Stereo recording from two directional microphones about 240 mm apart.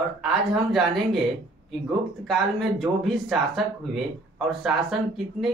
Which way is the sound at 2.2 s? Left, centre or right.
Centre.